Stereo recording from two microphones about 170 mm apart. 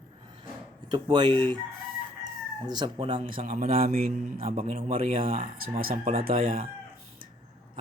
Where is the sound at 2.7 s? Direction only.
25° right (ahead or behind).